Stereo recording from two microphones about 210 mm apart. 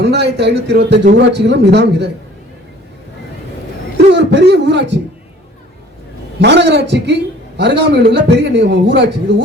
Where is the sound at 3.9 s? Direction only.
55° right (ahead or behind).